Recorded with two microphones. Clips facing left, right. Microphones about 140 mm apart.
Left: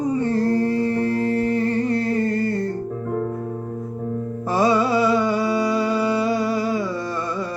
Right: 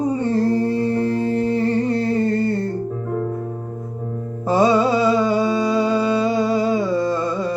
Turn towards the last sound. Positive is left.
turn(degrees=-25)  # may be behind; listen again after turning